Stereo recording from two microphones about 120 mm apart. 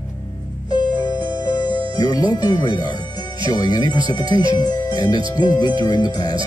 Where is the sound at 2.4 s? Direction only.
35° left (ahead or behind).